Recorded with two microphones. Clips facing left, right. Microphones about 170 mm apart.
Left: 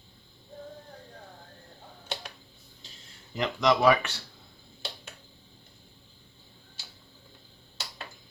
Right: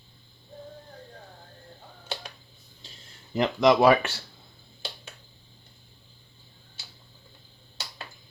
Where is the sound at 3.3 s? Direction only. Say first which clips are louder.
Right 5 dB; 40° right (ahead or behind).